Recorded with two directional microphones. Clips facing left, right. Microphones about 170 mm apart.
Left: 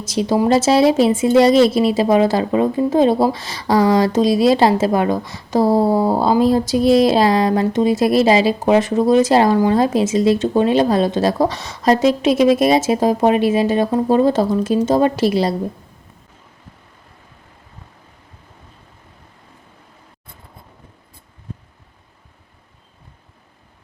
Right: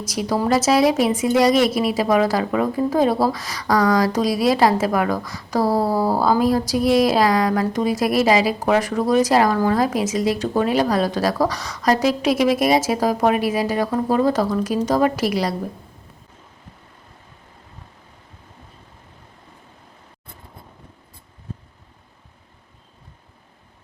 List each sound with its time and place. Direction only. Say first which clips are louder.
0.0 s speech: left 5 dB; 25° left (ahead or behind)